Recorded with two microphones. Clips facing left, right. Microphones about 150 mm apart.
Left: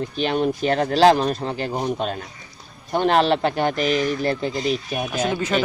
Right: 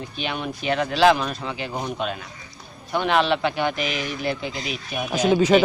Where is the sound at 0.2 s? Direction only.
40° left (ahead or behind).